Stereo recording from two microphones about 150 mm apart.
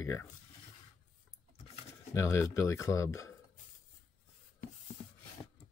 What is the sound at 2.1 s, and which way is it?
Speech, 20° left (ahead or behind).